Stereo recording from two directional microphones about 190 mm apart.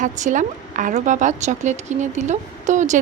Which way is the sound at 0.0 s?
40° right (ahead or behind).